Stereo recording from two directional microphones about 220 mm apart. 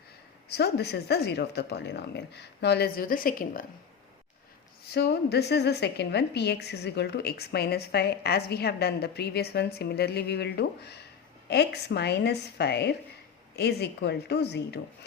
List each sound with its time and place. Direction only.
0.4 s a woman's voice: 50° left (ahead or behind)
4.9 s a woman's voice: 50° left (ahead or behind)